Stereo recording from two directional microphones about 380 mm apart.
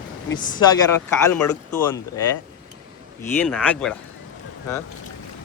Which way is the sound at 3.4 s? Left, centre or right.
Centre.